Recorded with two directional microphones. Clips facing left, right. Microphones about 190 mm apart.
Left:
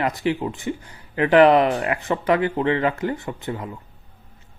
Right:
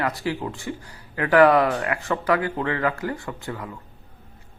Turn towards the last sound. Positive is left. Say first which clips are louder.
# left 3 dB
turn(degrees=20)  # may be behind; listen again after turning